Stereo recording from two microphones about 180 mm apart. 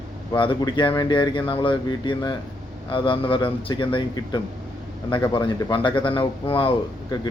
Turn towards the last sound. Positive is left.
turn(degrees=30)  # may be behind; listen again after turning